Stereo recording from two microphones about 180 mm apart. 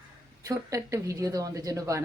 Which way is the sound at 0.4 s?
15° right (ahead or behind).